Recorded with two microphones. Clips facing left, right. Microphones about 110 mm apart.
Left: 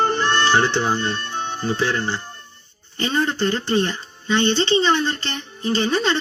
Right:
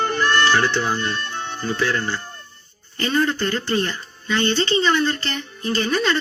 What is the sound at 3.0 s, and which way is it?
Speech, 25° left (ahead or behind).